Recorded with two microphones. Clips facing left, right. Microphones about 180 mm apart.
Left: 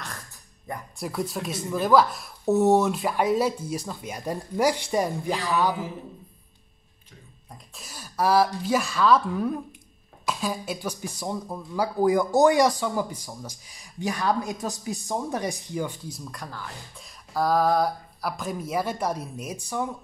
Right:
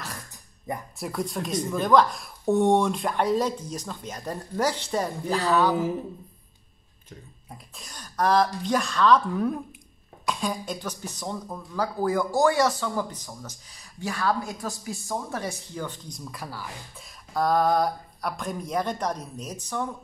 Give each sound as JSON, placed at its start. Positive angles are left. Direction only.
{"t": 0.9, "sound": "speech", "side_deg": 0}
{"t": 7.4, "sound": "speech", "side_deg": 0}